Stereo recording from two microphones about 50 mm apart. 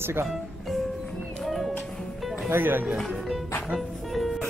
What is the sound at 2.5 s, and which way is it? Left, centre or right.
Speech, right.